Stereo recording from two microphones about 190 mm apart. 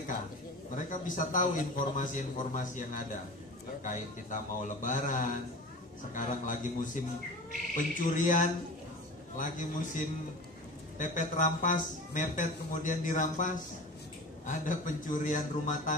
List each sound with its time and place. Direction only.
0.7 s a man's voice: 45° left (ahead or behind)